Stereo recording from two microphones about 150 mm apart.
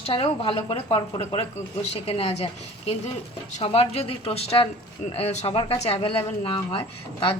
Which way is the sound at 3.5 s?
40° left (ahead or behind).